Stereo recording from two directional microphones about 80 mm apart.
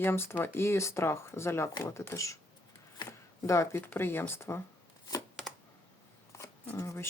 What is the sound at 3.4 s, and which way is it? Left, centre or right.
Speech, left.